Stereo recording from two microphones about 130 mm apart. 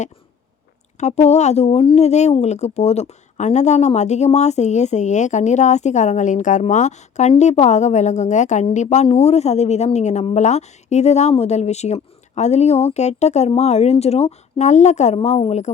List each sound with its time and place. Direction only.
0.9 s a woman's voice: 60° left (ahead or behind)